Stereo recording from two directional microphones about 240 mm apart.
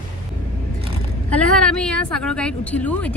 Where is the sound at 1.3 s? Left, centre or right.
Centre.